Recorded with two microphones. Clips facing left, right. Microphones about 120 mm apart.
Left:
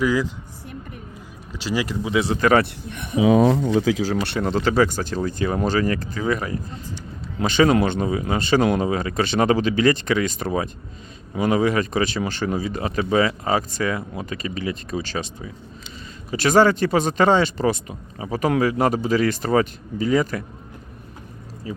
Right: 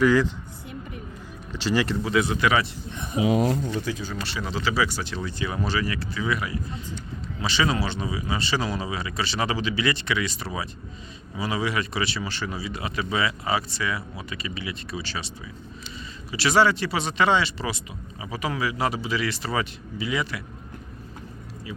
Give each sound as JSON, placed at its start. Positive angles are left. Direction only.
{"t": 0.0, "sound": "speech", "side_deg": 5}
{"t": 1.5, "sound": "speech", "side_deg": 5}
{"t": 2.0, "sound": "speech", "side_deg": 25}
{"t": 2.5, "sound": "a man's voice", "side_deg": 60}
{"t": 3.8, "sound": "speech", "side_deg": 90}
{"t": 16.3, "sound": "speech", "side_deg": 45}